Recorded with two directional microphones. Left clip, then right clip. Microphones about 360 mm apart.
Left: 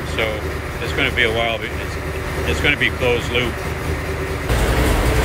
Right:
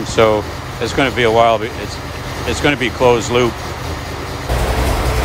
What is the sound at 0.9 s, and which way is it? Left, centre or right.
Speech, centre.